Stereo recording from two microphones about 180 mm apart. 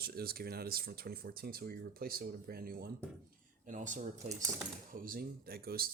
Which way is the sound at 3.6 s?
45° right (ahead or behind).